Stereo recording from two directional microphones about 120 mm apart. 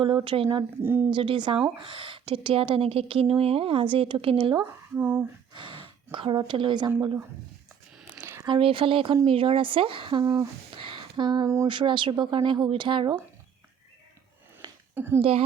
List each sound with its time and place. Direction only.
0.3 s a woman's voice: 50° right (ahead or behind)
0.8 s a woman's voice: 20° right (ahead or behind)
1.1 s a woman's voice: 45° right (ahead or behind)
4.6 s speech: 15° right (ahead or behind)
5.5 s speech: 45° right (ahead or behind)
8.1 s a sound: 20° right (ahead or behind)
8.4 s a woman's voice: 45° right (ahead or behind)
10.2 s a woman's voice: 30° right (ahead or behind)
10.7 s a sound: 45° right (ahead or behind)
11.4 s a woman's voice: 25° right (ahead or behind)
11.7 s a woman's voice: 45° right (ahead or behind)
14.9 s speech: 20° right (ahead or behind)
15.2 s a woman's voice: 55° right (ahead or behind)